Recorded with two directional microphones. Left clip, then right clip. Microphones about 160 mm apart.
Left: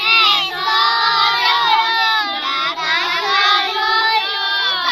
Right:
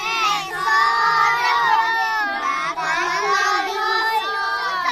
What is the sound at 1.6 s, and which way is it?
Crowd, 15° right (ahead or behind).